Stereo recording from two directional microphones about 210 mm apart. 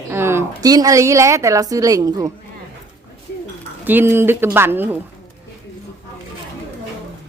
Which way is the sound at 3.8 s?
10° right (ahead or behind).